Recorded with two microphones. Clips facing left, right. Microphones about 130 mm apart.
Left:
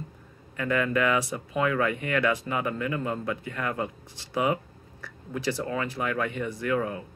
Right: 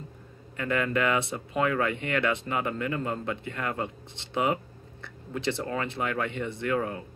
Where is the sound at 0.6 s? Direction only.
30° right (ahead or behind).